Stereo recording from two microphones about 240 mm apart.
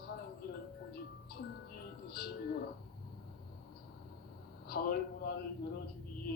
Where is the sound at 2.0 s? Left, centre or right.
Left.